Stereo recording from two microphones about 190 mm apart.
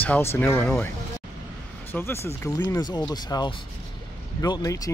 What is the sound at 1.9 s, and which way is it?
Speech, 10° left (ahead or behind).